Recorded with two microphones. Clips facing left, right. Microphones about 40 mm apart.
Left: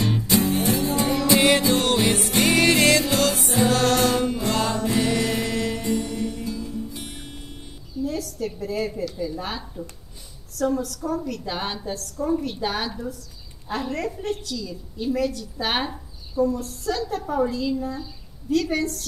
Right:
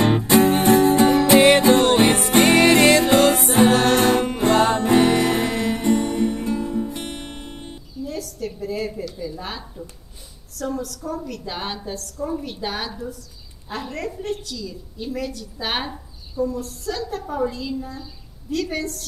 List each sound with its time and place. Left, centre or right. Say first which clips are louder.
0.0 s music: right 6 dB; right
2.4 s music: right 4 dB; right
3.7 s music: right 3 dB; right
7.9 s a sound: left 3 dB; centre
10.5 s a woman's voice: left 3 dB; centre